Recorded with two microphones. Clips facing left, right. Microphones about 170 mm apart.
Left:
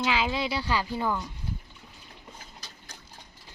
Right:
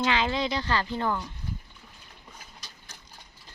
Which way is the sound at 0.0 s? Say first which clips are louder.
Right 1 dB; 5° left (ahead or behind).